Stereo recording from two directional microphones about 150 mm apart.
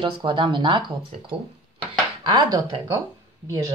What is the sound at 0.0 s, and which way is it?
Speech, 35° right (ahead or behind).